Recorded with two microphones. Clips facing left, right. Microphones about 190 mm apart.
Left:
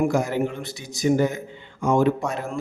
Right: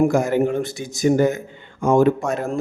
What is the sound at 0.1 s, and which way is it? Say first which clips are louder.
A man's voice: right 5 dB; 50° right (ahead or behind).